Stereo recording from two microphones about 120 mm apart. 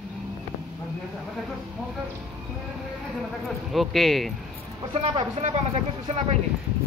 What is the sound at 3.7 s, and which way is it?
Speech, centre (ahead or behind).